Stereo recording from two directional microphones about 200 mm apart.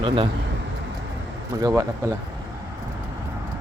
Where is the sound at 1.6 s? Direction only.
15° right (ahead or behind).